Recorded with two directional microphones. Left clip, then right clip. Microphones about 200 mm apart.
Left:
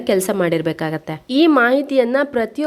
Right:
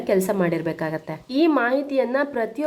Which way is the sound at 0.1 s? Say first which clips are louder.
Left 4 dB; 40° left (ahead or behind).